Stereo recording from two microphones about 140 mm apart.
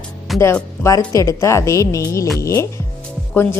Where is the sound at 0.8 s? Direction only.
25° left (ahead or behind).